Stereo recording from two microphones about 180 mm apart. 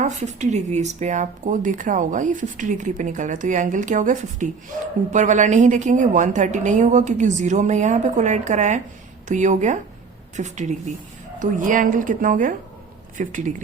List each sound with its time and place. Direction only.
0.0 s a woman's voice: 40° right (ahead or behind)